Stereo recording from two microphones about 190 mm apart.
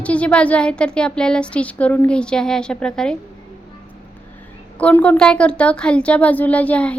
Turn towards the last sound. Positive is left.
turn(degrees=5)  # may be behind; listen again after turning